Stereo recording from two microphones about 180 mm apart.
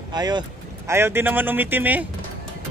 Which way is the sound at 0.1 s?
25° right (ahead or behind).